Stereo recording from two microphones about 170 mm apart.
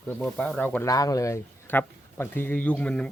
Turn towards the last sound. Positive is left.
turn(degrees=5)  # may be behind; listen again after turning